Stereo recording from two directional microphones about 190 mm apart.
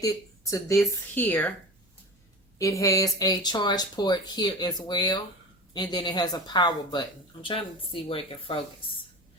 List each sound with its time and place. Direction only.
0.0 s speech: 15° left (ahead or behind)
2.6 s speech: 15° left (ahead or behind)